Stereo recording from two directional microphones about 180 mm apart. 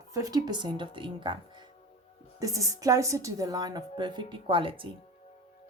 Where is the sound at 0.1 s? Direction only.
20° right (ahead or behind).